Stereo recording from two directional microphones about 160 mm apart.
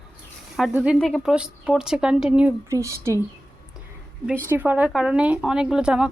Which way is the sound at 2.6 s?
20° right (ahead or behind).